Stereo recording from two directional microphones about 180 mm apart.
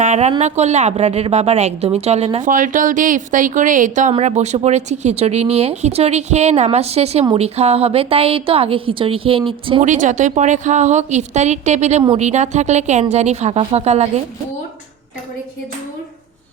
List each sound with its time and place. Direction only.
0.0 s speech: 40° right (ahead or behind)
2.5 s a woman's voice: 45° right (ahead or behind); by 9.8 s 30° right (ahead or behind)
9.8 s speech: 45° right (ahead or behind)